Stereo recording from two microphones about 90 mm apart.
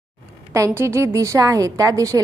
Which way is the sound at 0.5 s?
35° right (ahead or behind).